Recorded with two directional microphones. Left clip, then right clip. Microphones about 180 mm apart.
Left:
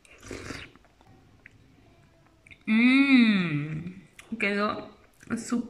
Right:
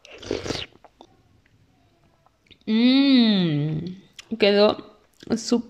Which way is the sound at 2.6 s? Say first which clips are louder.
Right 3 dB; 35° right (ahead or behind).